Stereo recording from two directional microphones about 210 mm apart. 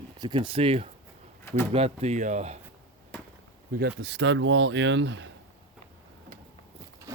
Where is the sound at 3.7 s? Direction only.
50° right (ahead or behind).